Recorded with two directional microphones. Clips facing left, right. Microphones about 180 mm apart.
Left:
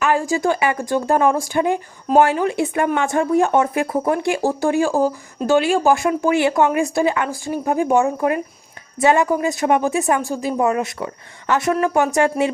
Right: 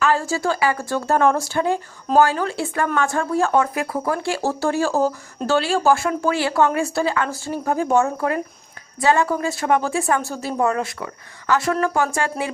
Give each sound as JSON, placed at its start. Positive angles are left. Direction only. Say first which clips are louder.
{"t": 0.0, "sound": "a woman's voice", "louder": "left 2 dB", "side_deg": 15}